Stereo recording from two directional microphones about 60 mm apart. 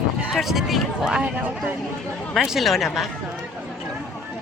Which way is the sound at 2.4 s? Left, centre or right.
Centre.